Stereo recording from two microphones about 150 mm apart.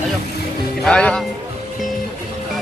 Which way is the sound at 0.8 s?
5° left (ahead or behind).